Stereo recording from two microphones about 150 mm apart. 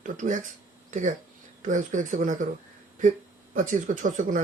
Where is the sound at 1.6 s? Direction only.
60° right (ahead or behind).